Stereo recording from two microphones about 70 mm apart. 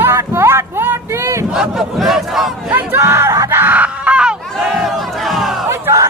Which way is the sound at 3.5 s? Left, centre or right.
Right.